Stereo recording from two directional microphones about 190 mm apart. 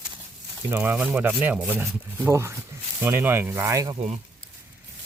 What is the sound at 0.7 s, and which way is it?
Speech, 10° right (ahead or behind).